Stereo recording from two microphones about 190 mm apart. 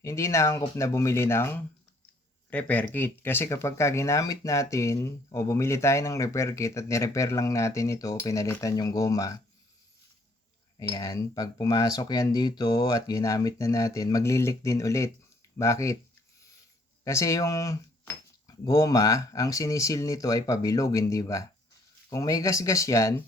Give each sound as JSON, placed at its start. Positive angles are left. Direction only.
{"t": 0.0, "sound": "speech", "side_deg": 15}
{"t": 10.9, "sound": "speech", "side_deg": 20}
{"t": 17.0, "sound": "cutlery", "side_deg": 15}
{"t": 18.6, "sound": "speech", "side_deg": 20}